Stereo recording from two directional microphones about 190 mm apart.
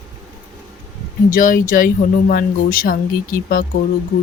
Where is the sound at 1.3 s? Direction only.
45° left (ahead or behind).